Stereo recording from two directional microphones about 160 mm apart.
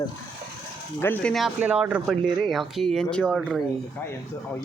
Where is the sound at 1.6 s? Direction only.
10° right (ahead or behind).